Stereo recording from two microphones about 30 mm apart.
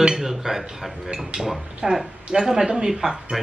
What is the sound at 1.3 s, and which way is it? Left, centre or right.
Speech, right.